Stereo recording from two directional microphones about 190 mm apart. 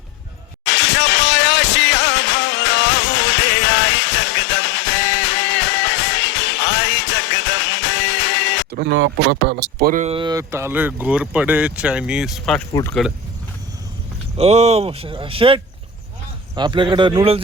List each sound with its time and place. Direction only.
0.6 s music: 70° left (ahead or behind)
8.7 s speech: 65° right (ahead or behind)
9.7 s speech: 45° right (ahead or behind)
10.2 s speech: 20° right (ahead or behind); by 12.6 s centre (ahead or behind)
14.3 s speech: 35° right (ahead or behind)